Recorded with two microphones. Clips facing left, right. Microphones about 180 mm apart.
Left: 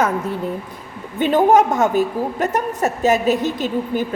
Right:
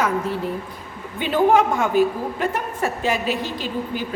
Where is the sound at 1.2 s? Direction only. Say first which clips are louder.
Left 3 dB; 45° left (ahead or behind).